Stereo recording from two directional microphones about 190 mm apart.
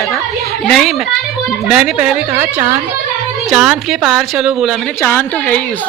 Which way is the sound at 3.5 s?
5° right (ahead or behind).